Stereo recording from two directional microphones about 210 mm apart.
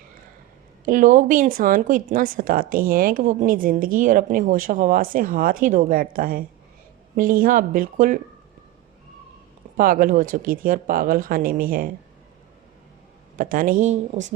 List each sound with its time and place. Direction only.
0.9 s a woman's voice: 40° right (ahead or behind)
9.7 s a woman's voice: 40° right (ahead or behind)
13.3 s a woman's voice: 40° right (ahead or behind)